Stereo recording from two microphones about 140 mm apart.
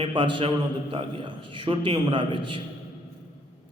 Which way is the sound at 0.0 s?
35° right (ahead or behind).